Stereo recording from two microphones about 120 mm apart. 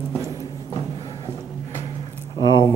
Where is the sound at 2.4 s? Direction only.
40° left (ahead or behind).